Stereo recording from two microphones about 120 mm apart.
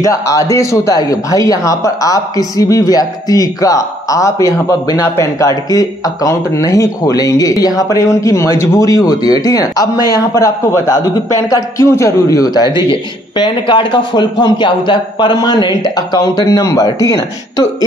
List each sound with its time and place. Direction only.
0.0 s a man's voice: 25° left (ahead or behind)